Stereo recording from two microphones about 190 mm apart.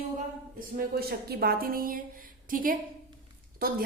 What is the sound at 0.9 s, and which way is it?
A woman's voice, 55° right (ahead or behind).